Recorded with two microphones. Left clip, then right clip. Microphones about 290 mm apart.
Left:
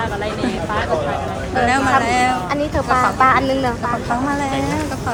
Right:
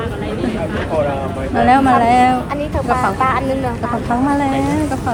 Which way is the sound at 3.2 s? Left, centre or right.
Left.